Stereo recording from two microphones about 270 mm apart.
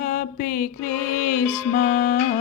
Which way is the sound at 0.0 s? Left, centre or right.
Left.